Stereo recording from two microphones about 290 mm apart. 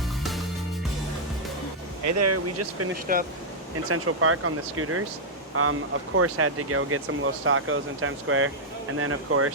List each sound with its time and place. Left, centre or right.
2.0 s speech: right
3.1 s speech: right
3.8 s speech: right
6.1 s speech: right